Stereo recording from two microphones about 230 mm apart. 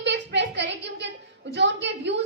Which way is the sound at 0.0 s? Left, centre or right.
Right.